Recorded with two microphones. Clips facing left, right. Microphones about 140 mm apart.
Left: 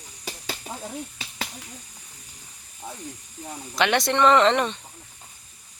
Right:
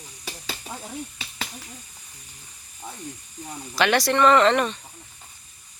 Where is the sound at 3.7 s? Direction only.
20° left (ahead or behind).